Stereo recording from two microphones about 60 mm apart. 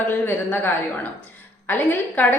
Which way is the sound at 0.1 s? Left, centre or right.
Left.